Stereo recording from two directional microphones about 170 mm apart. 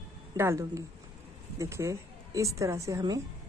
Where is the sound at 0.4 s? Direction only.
15° right (ahead or behind).